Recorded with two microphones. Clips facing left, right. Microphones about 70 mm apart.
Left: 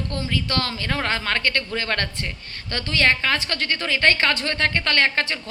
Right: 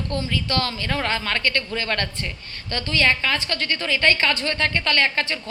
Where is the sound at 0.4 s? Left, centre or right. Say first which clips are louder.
Right 1 dB; left.